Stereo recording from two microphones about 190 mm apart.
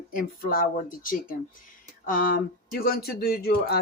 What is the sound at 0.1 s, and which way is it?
Speech, 50° left (ahead or behind).